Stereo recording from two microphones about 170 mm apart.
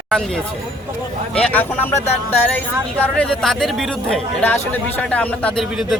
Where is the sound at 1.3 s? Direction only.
5° left (ahead or behind).